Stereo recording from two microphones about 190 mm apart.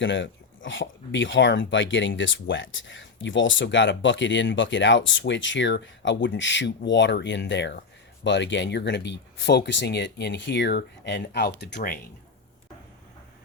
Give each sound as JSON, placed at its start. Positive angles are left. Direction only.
{"t": 0.0, "sound": "speech", "side_deg": 75}